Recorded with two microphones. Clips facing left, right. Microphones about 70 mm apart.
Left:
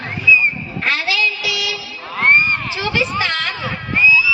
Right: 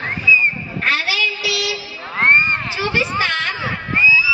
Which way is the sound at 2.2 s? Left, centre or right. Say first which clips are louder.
Even; centre.